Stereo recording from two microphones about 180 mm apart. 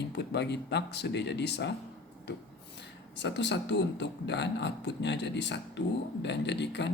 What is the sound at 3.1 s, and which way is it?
Speech, 75° left (ahead or behind).